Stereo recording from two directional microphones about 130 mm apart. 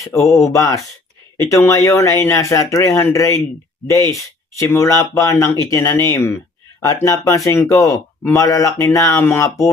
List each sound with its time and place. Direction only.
0.0 s speech: 20° left (ahead or behind)
4.5 s speech: 25° left (ahead or behind)